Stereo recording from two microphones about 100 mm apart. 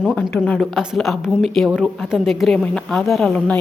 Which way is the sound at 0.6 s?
5° right (ahead or behind).